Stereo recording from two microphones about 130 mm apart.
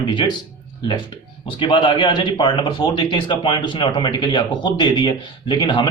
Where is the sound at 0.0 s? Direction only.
35° left (ahead or behind).